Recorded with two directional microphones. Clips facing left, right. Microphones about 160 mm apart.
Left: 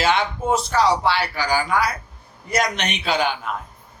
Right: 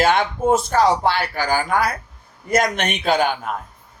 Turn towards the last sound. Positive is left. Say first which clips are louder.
# right 3 dB
turn(degrees=-50)  # may be behind; listen again after turning